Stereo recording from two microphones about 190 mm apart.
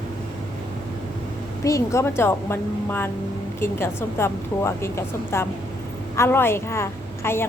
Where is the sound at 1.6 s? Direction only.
15° left (ahead or behind).